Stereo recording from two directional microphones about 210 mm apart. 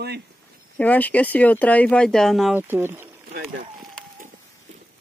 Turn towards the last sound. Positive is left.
turn(degrees=-10)  # may be behind; listen again after turning